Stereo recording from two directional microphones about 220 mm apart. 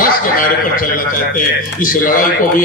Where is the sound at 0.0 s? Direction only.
40° left (ahead or behind).